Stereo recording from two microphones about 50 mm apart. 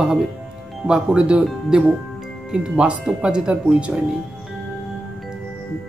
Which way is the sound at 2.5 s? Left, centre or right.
Right.